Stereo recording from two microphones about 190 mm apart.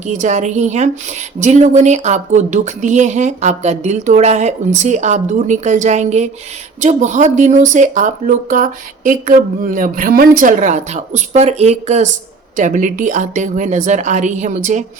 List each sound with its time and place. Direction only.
0.0 s speech: 40° right (ahead or behind)